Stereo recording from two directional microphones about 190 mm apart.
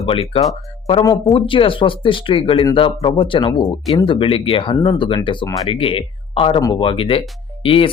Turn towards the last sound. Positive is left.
turn(degrees=30)  # may be behind; listen again after turning